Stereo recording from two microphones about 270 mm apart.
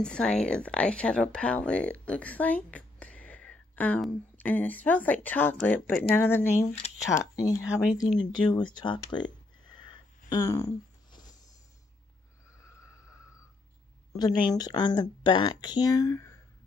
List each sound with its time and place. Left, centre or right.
0.0 s speech: centre
8.0 s a sound: centre
14.1 s speech: centre